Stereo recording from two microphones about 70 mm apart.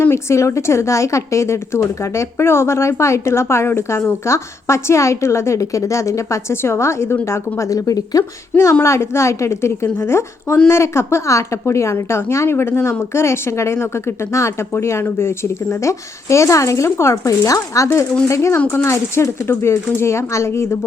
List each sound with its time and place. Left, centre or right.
0.1 s a woman's voice: left
7.7 s speech: left
8.8 s a woman's voice: left